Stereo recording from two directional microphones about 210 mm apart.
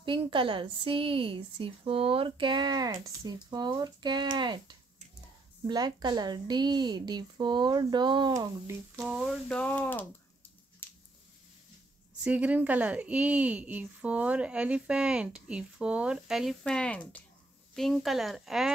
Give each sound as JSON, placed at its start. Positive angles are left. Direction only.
{"t": 0.0, "sound": "a woman's voice", "side_deg": -25}
{"t": 9.0, "sound": "speech", "side_deg": 0}
{"t": 12.2, "sound": "speech", "side_deg": -5}